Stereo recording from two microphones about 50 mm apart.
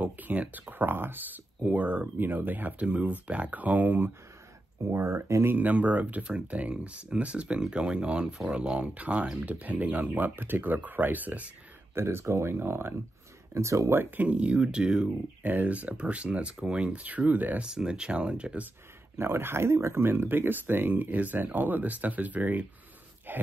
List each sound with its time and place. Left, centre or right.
0.0 s speech: right
4.8 s speech: right
5.5 s speech: right
11.9 s speech: right
13.6 s speech: right
13.9 s speech: right; by 15.0 s centre
15.0 s speech: right
17.6 s speech: centre
19.1 s speech: right